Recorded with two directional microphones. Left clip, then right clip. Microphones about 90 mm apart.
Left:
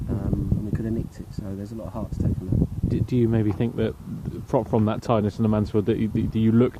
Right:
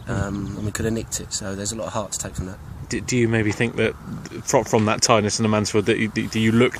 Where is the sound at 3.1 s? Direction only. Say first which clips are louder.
Right 3 dB; 20° left (ahead or behind).